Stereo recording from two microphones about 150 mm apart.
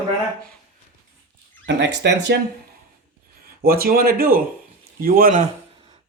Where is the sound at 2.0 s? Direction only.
90° right.